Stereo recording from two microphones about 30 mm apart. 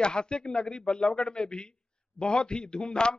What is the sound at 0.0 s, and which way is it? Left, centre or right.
A man's voice, left.